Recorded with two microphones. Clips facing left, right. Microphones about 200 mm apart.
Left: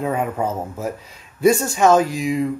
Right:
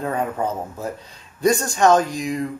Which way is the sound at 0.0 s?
5° left (ahead or behind).